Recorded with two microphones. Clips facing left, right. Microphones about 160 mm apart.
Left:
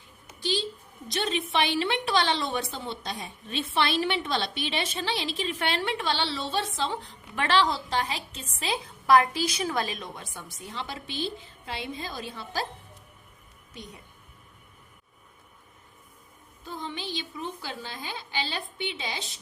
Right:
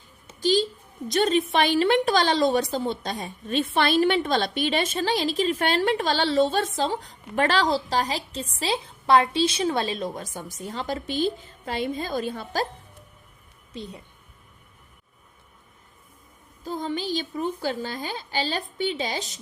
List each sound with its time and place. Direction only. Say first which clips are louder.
0.3 s a sound: right 8 dB; 45° right (ahead or behind)
1.0 s a woman's voice: right 8 dB; 45° right (ahead or behind)
13.7 s a woman's voice: right 7 dB; 30° right (ahead or behind)
16.6 s a woman's voice: right 8 dB; 40° right (ahead or behind)